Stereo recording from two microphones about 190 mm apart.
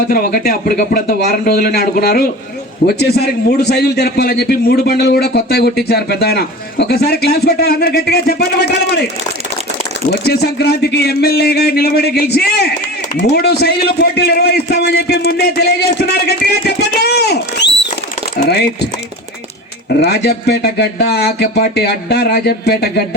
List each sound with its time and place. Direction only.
0.1 s speech: 50° left (ahead or behind)
10.1 s speech: 60° left (ahead or behind)
20.0 s speech: 60° left (ahead or behind)